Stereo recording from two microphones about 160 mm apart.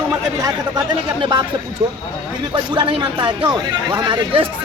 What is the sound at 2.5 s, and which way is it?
Speech, 30° right (ahead or behind).